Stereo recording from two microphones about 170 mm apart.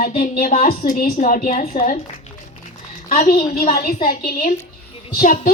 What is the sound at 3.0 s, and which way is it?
A woman's voice, 60° left (ahead or behind).